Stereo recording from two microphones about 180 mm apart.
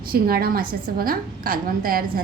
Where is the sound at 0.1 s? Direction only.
55° right (ahead or behind).